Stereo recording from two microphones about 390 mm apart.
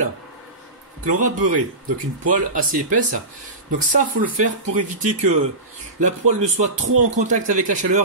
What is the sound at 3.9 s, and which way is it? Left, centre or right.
Speech, right.